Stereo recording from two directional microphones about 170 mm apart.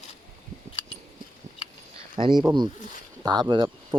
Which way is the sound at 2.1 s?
30° right (ahead or behind).